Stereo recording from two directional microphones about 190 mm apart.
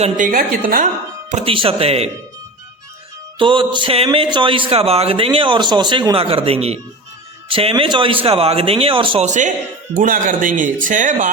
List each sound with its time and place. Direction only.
0.0 s speech: 45° right (ahead or behind)
1.3 s speech: 35° right (ahead or behind)
3.3 s a man's voice: 25° right (ahead or behind); by 11.3 s 45° right (ahead or behind)